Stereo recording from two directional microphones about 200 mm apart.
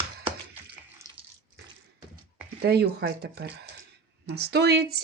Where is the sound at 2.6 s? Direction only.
55° right (ahead or behind).